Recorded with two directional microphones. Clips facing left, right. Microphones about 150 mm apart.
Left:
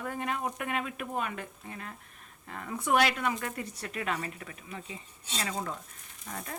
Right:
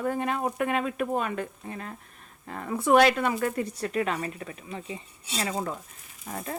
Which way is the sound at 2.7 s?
35° right (ahead or behind).